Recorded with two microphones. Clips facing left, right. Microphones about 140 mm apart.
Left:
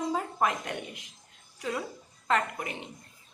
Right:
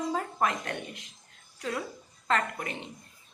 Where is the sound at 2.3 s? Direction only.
10° left (ahead or behind).